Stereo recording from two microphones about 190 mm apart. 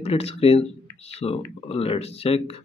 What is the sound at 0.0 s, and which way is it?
Speech, 30° left (ahead or behind).